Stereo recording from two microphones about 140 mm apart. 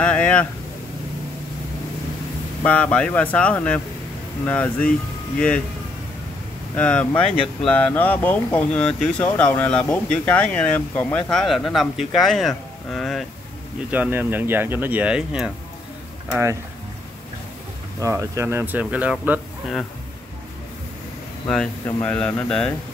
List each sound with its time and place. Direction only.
0.0 s speech: 10° left (ahead or behind)
2.6 s speech: 10° left (ahead or behind)
6.7 s speech: 10° left (ahead or behind)
13.8 s speech: 10° right (ahead or behind)
18.0 s speech: 20° right (ahead or behind)
21.5 s speech: 10° left (ahead or behind)